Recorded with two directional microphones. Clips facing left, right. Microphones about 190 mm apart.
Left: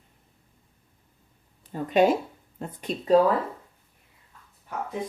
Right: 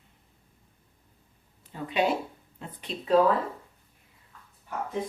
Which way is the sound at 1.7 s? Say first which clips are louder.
Left 6 dB; 45° left (ahead or behind).